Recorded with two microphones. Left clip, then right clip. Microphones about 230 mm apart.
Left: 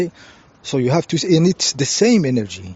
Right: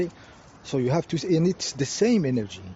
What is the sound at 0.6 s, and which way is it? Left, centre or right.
Speech, left.